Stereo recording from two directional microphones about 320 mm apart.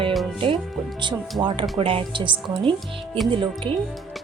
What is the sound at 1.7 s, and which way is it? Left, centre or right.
Speech, centre.